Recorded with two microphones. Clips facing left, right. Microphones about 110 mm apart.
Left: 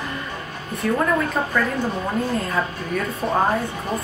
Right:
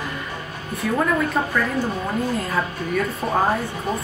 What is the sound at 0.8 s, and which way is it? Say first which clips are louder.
Speech: left 2 dB; 5° right (ahead or behind).